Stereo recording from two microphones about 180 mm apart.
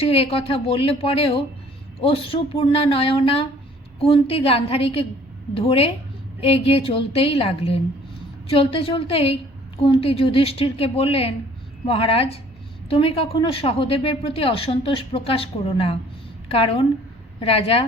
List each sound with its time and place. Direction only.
0.0 s a woman's voice: 35° left (ahead or behind)